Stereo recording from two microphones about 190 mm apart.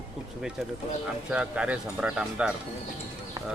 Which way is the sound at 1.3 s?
5° right (ahead or behind).